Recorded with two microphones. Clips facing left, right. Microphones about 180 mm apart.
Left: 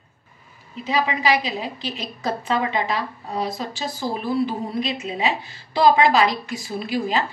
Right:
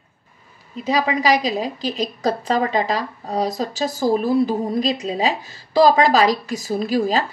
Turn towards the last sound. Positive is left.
turn(degrees=-40)  # may be behind; listen again after turning